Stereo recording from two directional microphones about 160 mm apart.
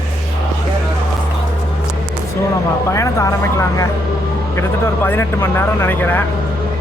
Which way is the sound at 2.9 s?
20° left (ahead or behind).